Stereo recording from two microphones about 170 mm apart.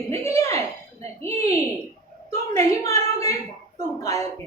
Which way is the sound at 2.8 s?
20° left (ahead or behind).